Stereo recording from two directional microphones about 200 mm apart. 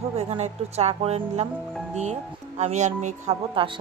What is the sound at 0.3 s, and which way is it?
Speech, 30° right (ahead or behind).